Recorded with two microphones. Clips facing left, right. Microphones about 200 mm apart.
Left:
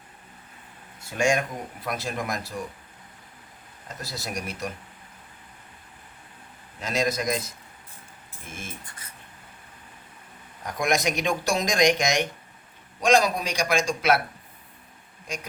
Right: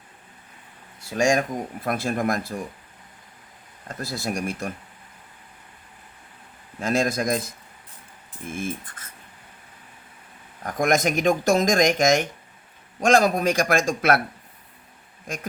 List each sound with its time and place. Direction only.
1.1 s speech: 40° right (ahead or behind)
1.8 s speech: 55° right (ahead or behind)
3.8 s speech: 55° right (ahead or behind)
6.7 s speech: 50° right (ahead or behind)
10.6 s speech: 50° right (ahead or behind)